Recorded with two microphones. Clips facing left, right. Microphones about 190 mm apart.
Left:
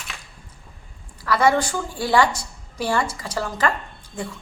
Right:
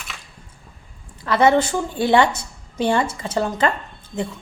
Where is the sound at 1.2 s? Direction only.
25° right (ahead or behind).